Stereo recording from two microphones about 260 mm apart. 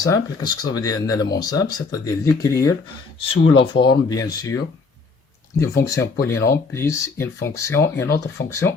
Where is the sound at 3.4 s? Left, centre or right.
Left.